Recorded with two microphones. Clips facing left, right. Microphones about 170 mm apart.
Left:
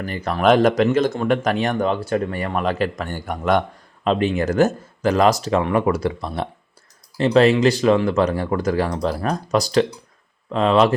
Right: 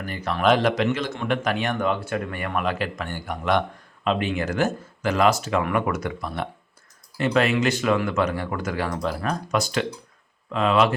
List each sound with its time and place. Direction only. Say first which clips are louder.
0.1 s speech: left 4 dB; 45° left (ahead or behind)